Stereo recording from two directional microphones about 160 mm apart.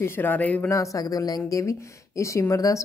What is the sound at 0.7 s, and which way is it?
Speech, 20° left (ahead or behind).